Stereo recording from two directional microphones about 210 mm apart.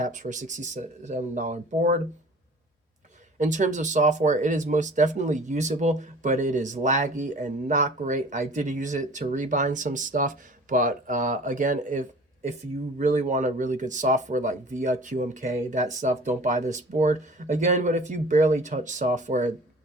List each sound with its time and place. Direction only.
0.0 s speech: 35° right (ahead or behind)
3.3 s speech: 35° right (ahead or behind)